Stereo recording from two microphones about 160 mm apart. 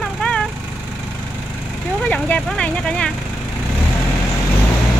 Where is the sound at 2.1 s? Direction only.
5° left (ahead or behind).